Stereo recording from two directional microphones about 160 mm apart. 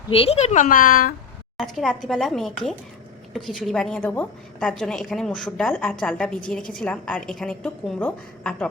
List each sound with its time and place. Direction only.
0.1 s a woman's voice: 40° left (ahead or behind); by 1.1 s 60° left (ahead or behind)
1.5 s a woman's voice: centre (ahead or behind)